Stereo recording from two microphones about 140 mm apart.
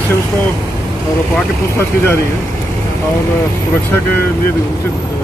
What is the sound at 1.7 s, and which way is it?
Speech, 20° left (ahead or behind).